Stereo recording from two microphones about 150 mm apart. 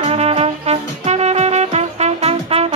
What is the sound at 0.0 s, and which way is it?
Music, 45° right (ahead or behind).